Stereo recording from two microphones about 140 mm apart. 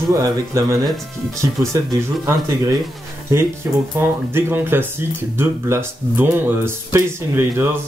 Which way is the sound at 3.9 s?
15° right (ahead or behind).